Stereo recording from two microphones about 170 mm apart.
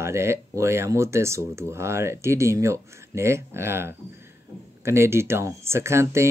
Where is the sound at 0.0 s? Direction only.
15° right (ahead or behind).